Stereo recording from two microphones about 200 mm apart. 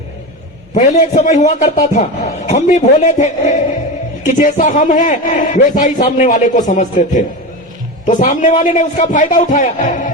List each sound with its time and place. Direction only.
0.7 s a man's voice: 35° left (ahead or behind)